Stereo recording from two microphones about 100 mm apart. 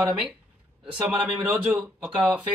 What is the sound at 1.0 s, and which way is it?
Speech, 5° right (ahead or behind).